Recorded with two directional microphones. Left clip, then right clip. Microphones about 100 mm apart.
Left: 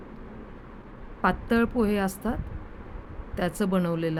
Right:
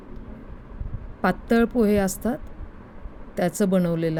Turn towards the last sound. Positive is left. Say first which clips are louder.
# right 4 dB
turn(degrees=-65)  # may be behind; listen again after turning